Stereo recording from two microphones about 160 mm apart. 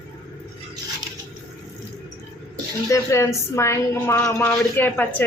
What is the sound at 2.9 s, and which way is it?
A woman's voice, 20° left (ahead or behind).